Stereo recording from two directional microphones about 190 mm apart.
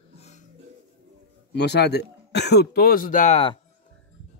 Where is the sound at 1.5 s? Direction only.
60° left (ahead or behind); by 3.5 s 35° left (ahead or behind).